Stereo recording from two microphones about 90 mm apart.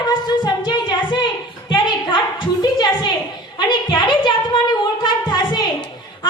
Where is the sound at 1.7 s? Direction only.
60° left (ahead or behind).